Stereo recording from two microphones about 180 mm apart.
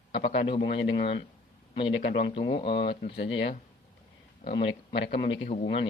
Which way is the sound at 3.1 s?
80° left.